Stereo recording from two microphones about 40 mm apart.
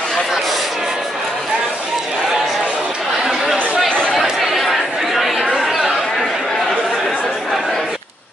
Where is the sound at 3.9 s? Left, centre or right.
Left.